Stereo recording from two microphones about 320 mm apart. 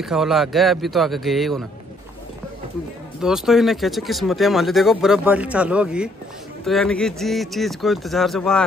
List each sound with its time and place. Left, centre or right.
0.0 s speech: centre
3.2 s speech: centre